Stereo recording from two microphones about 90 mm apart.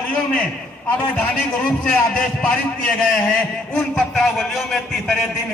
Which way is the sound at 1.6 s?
10° left (ahead or behind).